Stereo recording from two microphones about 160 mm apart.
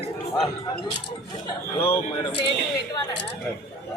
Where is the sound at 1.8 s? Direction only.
15° left (ahead or behind).